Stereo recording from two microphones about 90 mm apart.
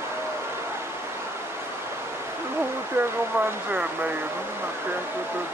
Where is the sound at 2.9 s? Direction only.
25° right (ahead or behind).